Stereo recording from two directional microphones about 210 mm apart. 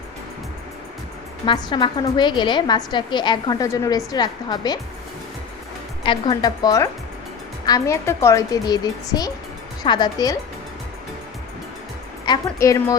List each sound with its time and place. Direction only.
1.5 s a woman's voice: 20° left (ahead or behind)
6.0 s a woman's voice: 25° left (ahead or behind)
12.2 s a woman's voice: 20° left (ahead or behind)